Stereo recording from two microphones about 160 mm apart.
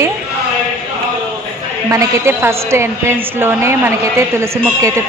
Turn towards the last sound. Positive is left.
turn(degrees=-15)  # may be behind; listen again after turning